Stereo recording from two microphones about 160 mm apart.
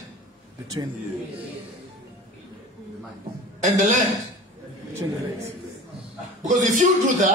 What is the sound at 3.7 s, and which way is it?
Speech, 55° right (ahead or behind).